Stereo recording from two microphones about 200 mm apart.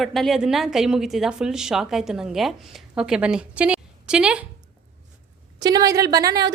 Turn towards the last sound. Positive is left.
turn(degrees=-20)  # may be behind; listen again after turning